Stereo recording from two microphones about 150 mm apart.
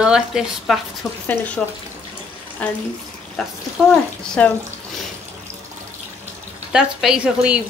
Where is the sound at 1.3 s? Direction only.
10° left (ahead or behind).